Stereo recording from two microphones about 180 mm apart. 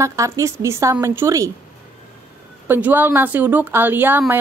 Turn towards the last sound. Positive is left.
turn(degrees=-10)  # may be behind; listen again after turning